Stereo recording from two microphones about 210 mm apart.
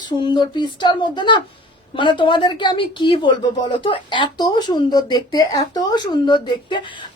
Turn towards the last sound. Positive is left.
turn(degrees=20)  # may be behind; listen again after turning